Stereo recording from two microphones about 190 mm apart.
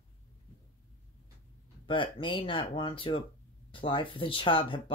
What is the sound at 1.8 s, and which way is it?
Speech, 25° left (ahead or behind).